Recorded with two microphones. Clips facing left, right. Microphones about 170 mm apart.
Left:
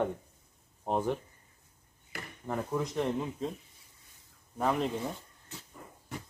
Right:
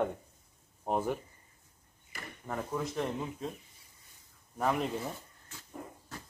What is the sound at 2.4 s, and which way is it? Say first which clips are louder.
Speech: left 3 dB; centre (ahead or behind).